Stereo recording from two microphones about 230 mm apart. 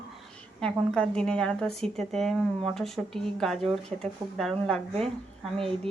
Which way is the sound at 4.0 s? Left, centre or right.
Centre.